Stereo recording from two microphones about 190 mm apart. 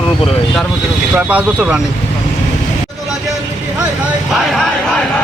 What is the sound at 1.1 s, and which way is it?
Speech, 5° right (ahead or behind).